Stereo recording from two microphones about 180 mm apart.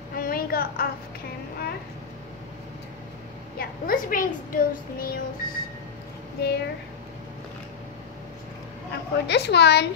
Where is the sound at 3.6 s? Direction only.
50° left (ahead or behind).